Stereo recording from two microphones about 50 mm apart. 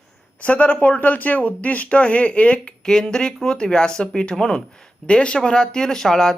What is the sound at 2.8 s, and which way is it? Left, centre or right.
Speech, centre.